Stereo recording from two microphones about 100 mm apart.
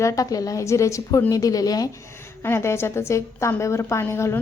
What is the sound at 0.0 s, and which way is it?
A woman's voice, 35° left (ahead or behind).